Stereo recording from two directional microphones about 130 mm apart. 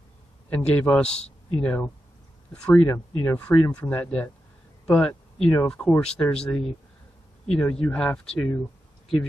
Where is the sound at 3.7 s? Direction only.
10° left (ahead or behind).